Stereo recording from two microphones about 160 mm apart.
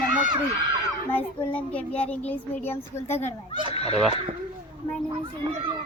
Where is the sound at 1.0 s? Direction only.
10° left (ahead or behind).